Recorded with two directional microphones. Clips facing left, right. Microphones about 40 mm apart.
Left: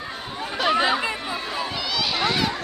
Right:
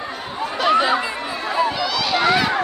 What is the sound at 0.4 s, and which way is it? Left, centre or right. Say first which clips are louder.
Chatter: right 4 dB; centre.